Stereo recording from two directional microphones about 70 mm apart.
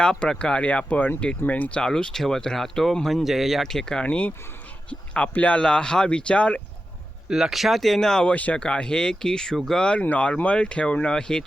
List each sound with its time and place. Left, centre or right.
0.0 s speech: centre
1.8 s speech: centre
4.0 s speech: centre
7.3 s speech: centre